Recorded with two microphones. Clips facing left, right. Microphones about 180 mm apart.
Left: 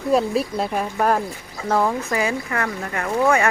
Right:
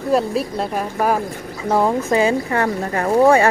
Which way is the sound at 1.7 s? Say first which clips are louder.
Right 3 dB; 20° right (ahead or behind).